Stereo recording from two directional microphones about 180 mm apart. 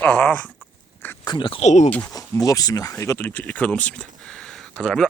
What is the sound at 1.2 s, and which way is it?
Speech, 25° left (ahead or behind).